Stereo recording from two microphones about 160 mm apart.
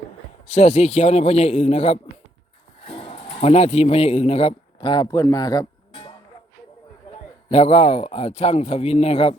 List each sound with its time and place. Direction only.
0.4 s a man's voice: 40° left (ahead or behind); by 5.6 s 25° left (ahead or behind)
5.9 s music: 35° left (ahead or behind)
7.5 s speech: 40° left (ahead or behind)